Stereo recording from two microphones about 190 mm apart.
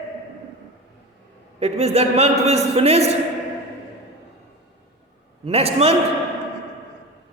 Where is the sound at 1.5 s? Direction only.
35° right (ahead or behind).